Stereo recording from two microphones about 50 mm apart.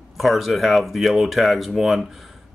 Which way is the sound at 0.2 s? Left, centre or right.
Centre.